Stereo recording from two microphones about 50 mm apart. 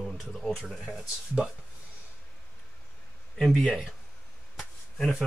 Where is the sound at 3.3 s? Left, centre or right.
Centre.